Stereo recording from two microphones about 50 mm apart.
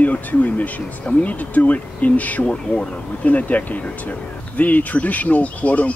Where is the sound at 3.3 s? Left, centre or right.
Left.